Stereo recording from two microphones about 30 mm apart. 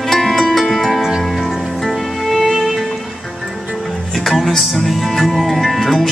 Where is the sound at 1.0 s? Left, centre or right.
Centre.